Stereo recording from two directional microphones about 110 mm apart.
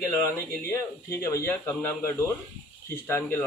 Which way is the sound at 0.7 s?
30° left (ahead or behind).